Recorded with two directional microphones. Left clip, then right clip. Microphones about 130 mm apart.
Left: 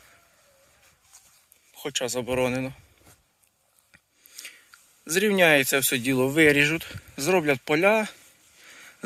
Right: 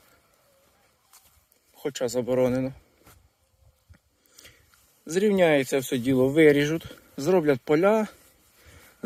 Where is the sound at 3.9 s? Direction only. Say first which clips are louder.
Left 9 dB; 35° right (ahead or behind).